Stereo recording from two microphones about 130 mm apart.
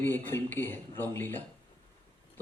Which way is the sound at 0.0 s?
15° left (ahead or behind).